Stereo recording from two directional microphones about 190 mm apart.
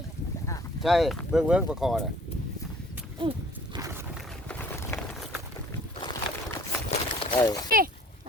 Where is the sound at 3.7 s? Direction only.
15° right (ahead or behind).